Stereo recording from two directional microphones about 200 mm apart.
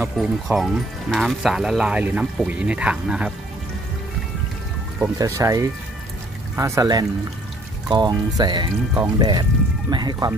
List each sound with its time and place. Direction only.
0.0 s speech: 5° right (ahead or behind)
5.0 s speech: 15° right (ahead or behind)